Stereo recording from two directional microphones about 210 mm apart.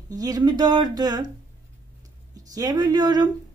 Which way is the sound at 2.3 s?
15° right (ahead or behind).